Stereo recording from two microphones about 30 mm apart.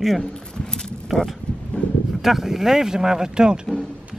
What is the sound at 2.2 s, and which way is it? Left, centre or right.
Speech, centre.